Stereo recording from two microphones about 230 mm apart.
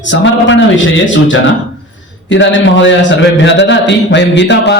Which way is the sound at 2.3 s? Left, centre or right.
Left.